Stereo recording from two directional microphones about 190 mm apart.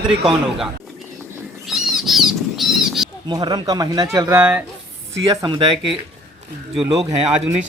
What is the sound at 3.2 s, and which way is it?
Speech, 20° right (ahead or behind).